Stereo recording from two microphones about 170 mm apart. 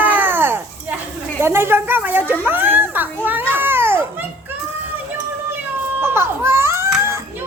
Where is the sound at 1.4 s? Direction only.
15° right (ahead or behind).